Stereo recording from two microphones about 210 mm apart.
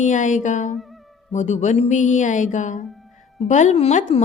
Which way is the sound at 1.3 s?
35° left (ahead or behind).